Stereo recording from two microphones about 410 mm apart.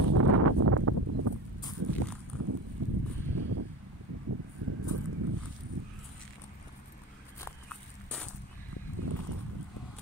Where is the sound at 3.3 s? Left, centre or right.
Right.